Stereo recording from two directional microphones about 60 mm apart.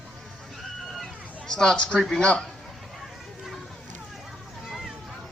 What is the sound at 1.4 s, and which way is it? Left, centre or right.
A woman's voice, centre.